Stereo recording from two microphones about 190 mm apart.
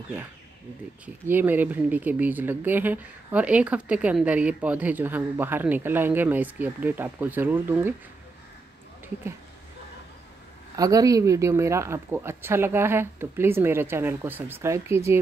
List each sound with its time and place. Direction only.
1.0 s speech: 10° right (ahead or behind)
10.8 s speech: 20° right (ahead or behind)